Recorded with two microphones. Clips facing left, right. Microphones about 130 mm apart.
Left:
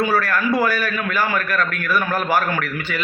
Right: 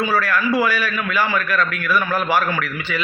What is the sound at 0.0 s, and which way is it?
A man's voice, 45° left (ahead or behind).